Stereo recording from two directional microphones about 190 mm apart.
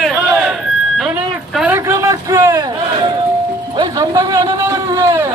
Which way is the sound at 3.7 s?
20° right (ahead or behind).